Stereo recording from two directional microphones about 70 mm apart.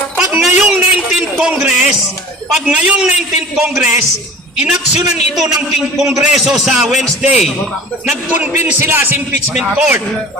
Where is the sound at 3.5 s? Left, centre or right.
Centre.